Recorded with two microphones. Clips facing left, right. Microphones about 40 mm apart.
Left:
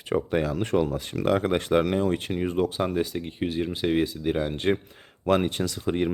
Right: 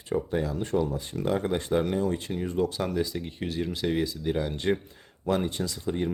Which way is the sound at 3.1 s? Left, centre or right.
Centre.